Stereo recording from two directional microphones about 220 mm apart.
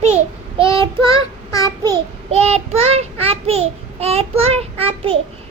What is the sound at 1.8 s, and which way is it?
Child singing, 25° right (ahead or behind).